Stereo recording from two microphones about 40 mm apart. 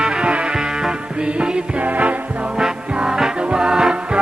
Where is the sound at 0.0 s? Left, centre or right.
Right.